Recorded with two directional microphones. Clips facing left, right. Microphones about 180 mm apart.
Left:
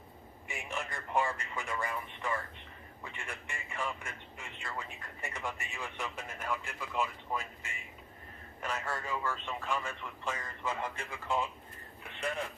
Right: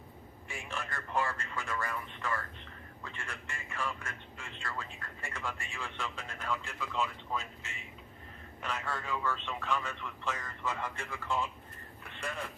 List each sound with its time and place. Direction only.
0.5 s a man's voice: 15° left (ahead or behind)